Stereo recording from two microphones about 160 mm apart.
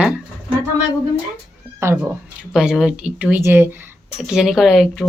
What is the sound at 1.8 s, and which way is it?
Speech, 15° right (ahead or behind).